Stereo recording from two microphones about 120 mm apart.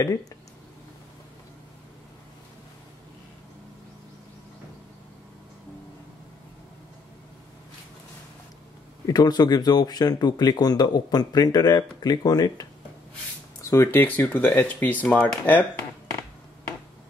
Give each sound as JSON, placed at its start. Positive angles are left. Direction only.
{"t": 9.0, "sound": "speech", "side_deg": 35}
{"t": 13.7, "sound": "speech", "side_deg": 20}